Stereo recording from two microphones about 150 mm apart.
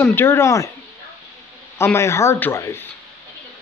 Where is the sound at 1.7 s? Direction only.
15° left (ahead or behind).